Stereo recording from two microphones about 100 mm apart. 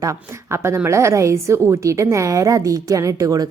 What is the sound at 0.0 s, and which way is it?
A woman's voice, 30° right (ahead or behind).